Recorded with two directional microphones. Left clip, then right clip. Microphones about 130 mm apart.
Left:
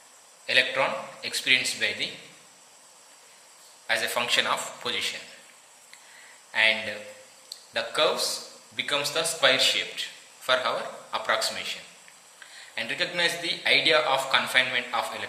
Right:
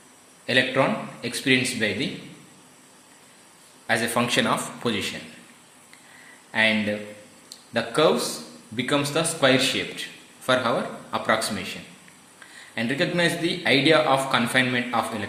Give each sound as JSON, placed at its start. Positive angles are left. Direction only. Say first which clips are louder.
{"t": 0.4, "sound": "a man's voice", "louder": "right 2 dB", "side_deg": -45}
{"t": 3.8, "sound": "speech", "louder": "right 3 dB", "side_deg": -40}
{"t": 6.5, "sound": "a man's voice", "louder": "right 1 dB", "side_deg": -45}